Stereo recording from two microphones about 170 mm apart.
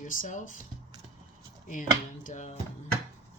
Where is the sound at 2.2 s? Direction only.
40° left (ahead or behind).